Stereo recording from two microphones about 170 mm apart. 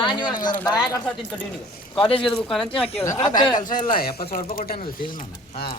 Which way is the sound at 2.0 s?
30° left (ahead or behind).